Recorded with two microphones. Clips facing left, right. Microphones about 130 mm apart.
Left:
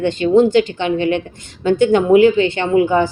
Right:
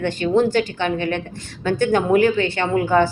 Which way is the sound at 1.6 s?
20° left (ahead or behind).